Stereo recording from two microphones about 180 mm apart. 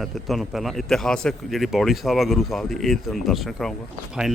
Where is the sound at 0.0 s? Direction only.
Centre (ahead or behind).